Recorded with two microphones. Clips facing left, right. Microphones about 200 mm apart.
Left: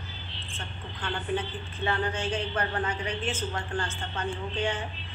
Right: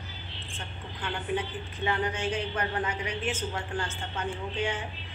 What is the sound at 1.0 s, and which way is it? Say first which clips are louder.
Speech: left 1 dB; 15° right (ahead or behind).